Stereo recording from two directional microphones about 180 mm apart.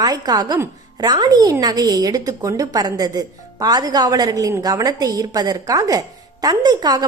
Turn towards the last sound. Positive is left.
turn(degrees=-20)  # may be behind; listen again after turning